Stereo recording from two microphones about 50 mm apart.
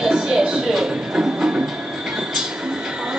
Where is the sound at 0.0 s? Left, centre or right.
Centre.